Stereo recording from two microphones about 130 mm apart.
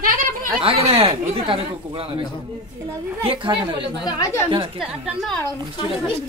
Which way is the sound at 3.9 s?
35° left (ahead or behind).